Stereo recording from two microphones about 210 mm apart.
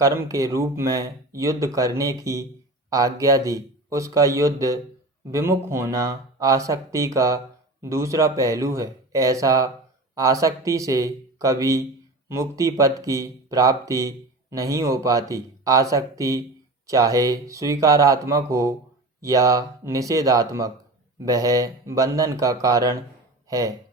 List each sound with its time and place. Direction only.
0.0 s speech: 15° right (ahead or behind)